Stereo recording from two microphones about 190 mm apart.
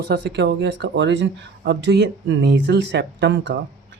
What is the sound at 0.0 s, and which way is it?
Speech, 60° right (ahead or behind).